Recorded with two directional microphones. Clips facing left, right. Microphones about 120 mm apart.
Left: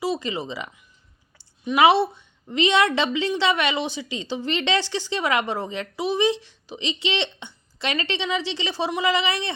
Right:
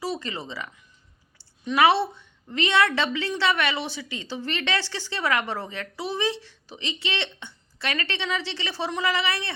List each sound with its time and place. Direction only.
0.0 s a woman's voice: 15° left (ahead or behind)